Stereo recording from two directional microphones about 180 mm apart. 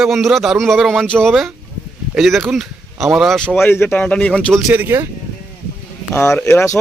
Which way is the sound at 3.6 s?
10° left (ahead or behind).